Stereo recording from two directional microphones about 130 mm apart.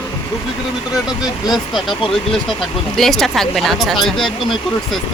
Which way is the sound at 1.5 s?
Centre (ahead or behind).